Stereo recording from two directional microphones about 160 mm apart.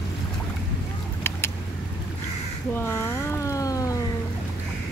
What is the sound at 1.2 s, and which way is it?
Vehicle, 15° left (ahead or behind).